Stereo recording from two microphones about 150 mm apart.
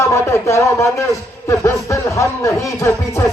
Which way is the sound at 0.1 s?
20° left (ahead or behind).